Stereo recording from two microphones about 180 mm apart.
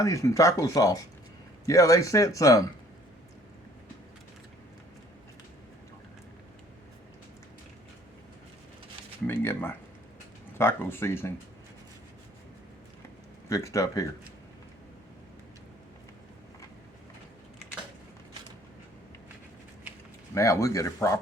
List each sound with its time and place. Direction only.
0.0 s speech: 15° left (ahead or behind)
9.2 s speech: 15° left (ahead or behind)
13.5 s speech: 15° left (ahead or behind)
20.3 s speech: 15° left (ahead or behind)